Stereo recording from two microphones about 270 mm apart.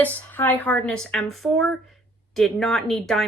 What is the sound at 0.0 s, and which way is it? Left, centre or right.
Speech, centre.